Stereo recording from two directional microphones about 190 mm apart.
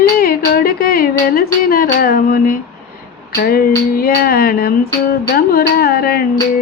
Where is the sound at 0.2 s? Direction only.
55° left (ahead or behind).